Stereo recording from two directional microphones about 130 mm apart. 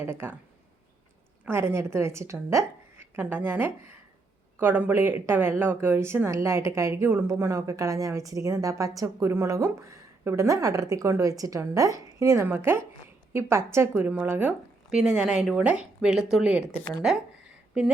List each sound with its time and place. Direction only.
0.0 s speech: 15° right (ahead or behind)
1.5 s a woman's voice: 20° right (ahead or behind)